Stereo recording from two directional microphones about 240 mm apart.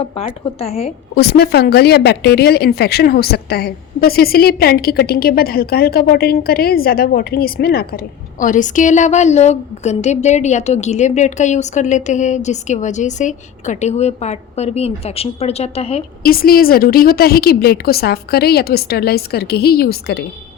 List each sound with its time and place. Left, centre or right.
0.0 s a woman's voice: left
1.1 s a woman's voice: left
16.2 s a woman's voice: left